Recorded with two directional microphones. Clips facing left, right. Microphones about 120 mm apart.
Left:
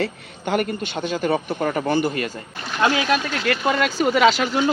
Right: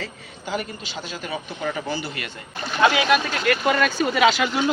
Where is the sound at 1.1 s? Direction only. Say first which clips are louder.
Left 11 dB; 55° left (ahead or behind).